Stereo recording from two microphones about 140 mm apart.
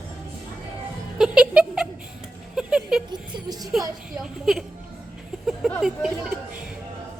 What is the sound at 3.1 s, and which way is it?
Speech, 30° right (ahead or behind).